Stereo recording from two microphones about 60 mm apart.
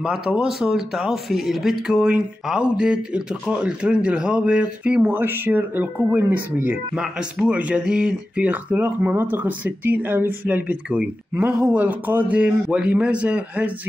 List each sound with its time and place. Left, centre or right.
0.0 s a man's voice: centre
5.0 s speech: right
7.0 s a man's voice: centre